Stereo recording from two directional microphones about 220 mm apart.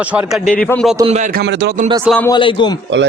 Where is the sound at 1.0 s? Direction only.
35° right (ahead or behind).